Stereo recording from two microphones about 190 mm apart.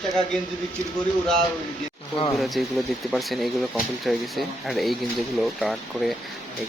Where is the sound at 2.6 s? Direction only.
Centre (ahead or behind).